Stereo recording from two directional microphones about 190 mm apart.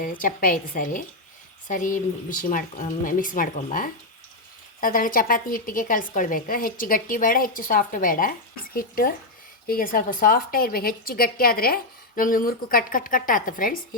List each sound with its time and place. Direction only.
0.0 s a woman's voice: 45° left (ahead or behind)